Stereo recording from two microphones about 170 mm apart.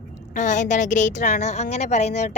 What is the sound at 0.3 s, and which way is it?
A woman's voice, 45° left (ahead or behind).